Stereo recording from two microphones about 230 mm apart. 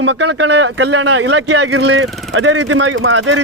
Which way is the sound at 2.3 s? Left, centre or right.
Right.